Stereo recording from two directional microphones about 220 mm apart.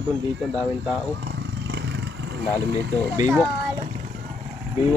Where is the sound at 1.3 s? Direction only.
50° right (ahead or behind).